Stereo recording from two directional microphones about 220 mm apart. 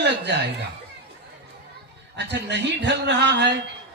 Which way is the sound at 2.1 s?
50° right (ahead or behind).